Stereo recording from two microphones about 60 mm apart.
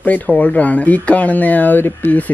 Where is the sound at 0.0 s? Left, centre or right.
Left.